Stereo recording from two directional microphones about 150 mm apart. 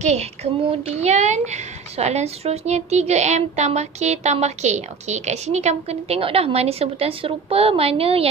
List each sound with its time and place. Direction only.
0.7 s a woman's voice: 45° right (ahead or behind)